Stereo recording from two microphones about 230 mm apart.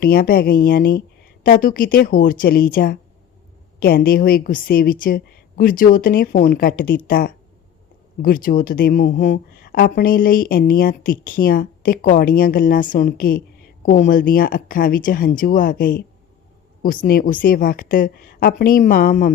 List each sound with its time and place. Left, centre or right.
0.0 s speech: left